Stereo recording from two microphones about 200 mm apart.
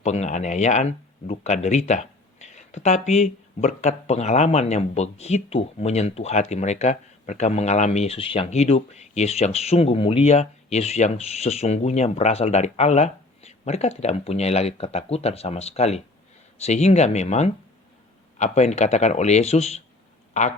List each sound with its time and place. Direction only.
0.0 s speech: 35° left (ahead or behind)